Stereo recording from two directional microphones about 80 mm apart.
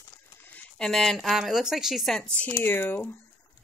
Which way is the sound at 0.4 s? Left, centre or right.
Left.